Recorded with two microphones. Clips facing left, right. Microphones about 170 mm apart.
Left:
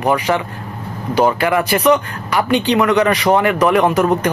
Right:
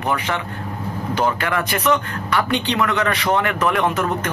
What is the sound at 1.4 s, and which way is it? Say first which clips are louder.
Speech: left 6 dB; 10° left (ahead or behind).